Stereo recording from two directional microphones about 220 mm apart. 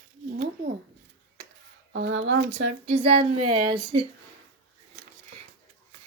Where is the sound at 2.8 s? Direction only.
25° right (ahead or behind).